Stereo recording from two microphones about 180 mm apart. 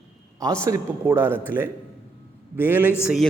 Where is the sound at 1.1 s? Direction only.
10° right (ahead or behind).